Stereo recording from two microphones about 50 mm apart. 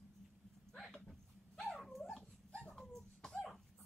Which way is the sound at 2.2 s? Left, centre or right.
Left.